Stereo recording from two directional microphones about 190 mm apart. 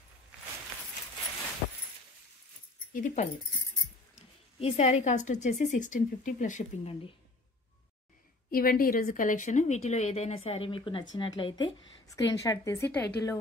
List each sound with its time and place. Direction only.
2.9 s speech: 45° left (ahead or behind)
4.6 s a woman's voice: 35° left (ahead or behind)
8.5 s a woman's voice: 50° left (ahead or behind); by 13.4 s 15° left (ahead or behind)